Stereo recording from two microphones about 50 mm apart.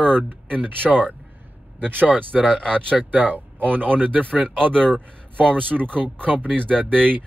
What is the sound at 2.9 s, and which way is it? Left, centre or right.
Speech, right.